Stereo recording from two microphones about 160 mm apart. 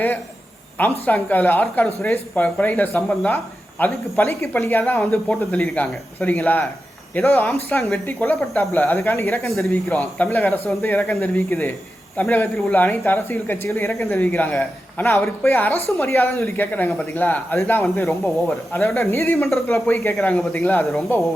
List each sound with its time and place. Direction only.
0.8 s speech: 10° left (ahead or behind)
9.5 s speech: centre (ahead or behind)
11.3 s speech: 15° left (ahead or behind)
20.1 s speech: 5° left (ahead or behind)